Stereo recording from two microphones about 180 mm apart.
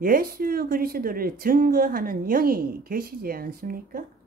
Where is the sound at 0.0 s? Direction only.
55° right (ahead or behind).